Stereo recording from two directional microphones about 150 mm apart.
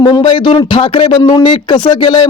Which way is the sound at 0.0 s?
35° left (ahead or behind).